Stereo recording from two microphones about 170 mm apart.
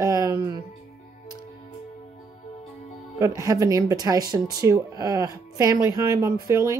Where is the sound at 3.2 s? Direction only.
20° right (ahead or behind).